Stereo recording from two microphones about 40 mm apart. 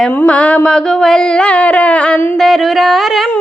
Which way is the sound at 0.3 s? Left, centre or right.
Left.